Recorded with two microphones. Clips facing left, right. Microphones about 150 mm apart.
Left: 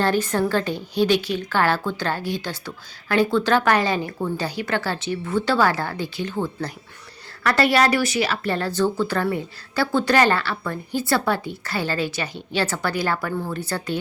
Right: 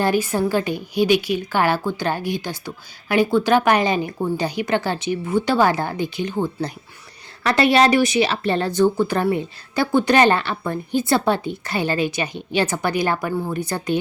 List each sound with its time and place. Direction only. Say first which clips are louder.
0.0 s a woman's voice: right 1 dB; 10° right (ahead or behind)